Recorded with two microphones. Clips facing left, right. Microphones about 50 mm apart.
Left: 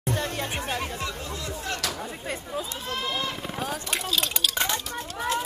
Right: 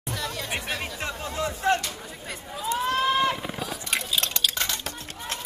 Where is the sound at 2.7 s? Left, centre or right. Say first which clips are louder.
Right 12 dB; right.